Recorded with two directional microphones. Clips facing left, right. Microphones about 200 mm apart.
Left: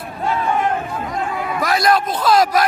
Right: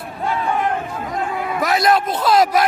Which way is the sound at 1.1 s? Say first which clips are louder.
Right 1 dB; 20° right (ahead or behind).